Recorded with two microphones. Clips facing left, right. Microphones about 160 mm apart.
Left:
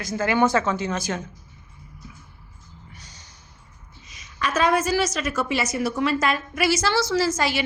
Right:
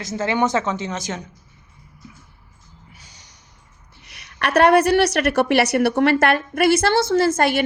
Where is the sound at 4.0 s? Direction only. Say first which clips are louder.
Right 3 dB; 70° right (ahead or behind).